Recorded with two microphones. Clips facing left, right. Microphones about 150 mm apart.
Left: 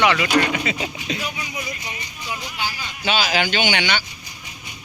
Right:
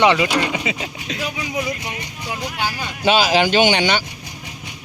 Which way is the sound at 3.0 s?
40° right (ahead or behind).